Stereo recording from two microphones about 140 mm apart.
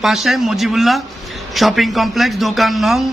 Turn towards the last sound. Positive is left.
turn(degrees=0)  # may be behind; listen again after turning